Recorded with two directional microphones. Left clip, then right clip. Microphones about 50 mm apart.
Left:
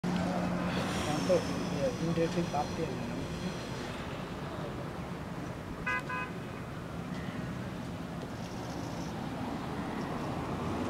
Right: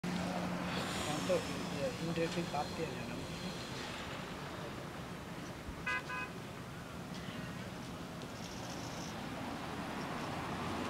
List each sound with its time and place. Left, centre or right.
0.0 s vehicle: centre
0.7 s speech: centre
5.9 s car: right
10.6 s vehicle: right